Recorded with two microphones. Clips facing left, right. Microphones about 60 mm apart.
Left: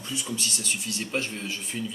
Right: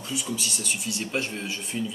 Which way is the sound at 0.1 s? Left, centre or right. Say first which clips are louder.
Right 1 dB; centre.